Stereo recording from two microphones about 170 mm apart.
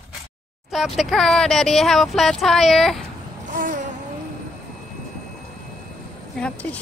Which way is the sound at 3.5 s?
50° right (ahead or behind).